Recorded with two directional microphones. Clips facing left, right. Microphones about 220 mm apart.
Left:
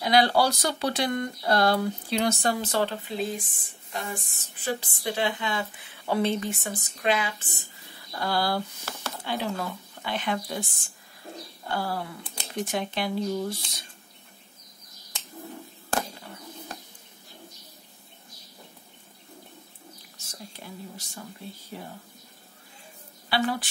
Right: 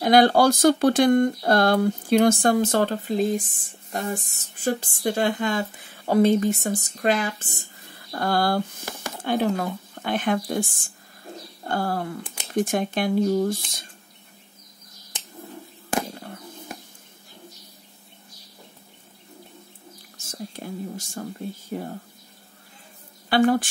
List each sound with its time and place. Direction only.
0.0 s speech: 50° right (ahead or behind)
20.2 s speech: 50° right (ahead or behind)
23.3 s speech: 50° right (ahead or behind)